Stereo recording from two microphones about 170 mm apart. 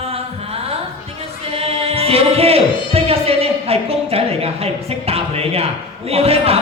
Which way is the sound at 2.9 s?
35° right (ahead or behind).